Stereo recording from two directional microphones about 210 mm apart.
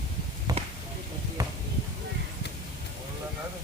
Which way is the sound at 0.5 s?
15° right (ahead or behind).